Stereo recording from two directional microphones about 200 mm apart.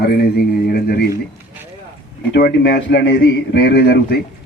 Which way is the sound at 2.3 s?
55° left (ahead or behind).